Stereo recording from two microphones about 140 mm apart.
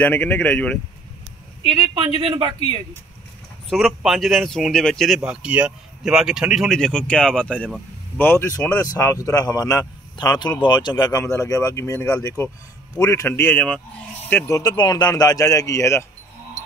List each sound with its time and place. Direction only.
0.0 s speech: 10° left (ahead or behind)
2.0 s speech: 35° right (ahead or behind)
3.7 s speech: centre (ahead or behind)
5.2 s speech: 10° right (ahead or behind); by 13.7 s 10° left (ahead or behind)
14.3 s speech: 25° left (ahead or behind)